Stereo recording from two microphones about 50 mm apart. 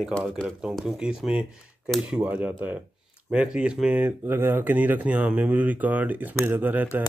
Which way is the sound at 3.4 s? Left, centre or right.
Centre.